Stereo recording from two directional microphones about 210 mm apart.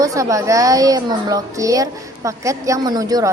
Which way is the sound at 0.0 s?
15° right (ahead or behind).